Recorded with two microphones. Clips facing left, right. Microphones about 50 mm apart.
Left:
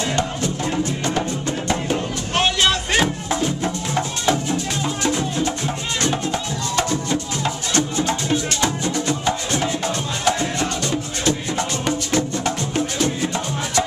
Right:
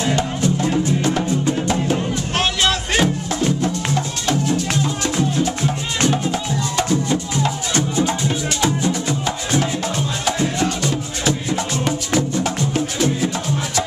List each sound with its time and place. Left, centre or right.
0.0 s music: centre
3.6 s music: centre
4.5 s music: centre
6.8 s music: centre